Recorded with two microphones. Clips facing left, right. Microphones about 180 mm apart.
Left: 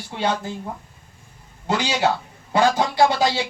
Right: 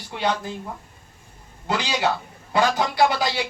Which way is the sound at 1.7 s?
20° left (ahead or behind).